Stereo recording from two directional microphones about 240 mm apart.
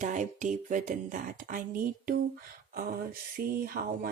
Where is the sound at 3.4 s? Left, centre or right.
Right.